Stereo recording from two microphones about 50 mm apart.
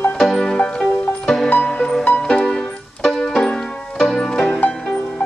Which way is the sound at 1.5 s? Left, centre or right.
Left.